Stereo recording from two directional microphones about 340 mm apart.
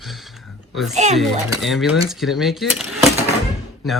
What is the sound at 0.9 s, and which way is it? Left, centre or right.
Speech, centre.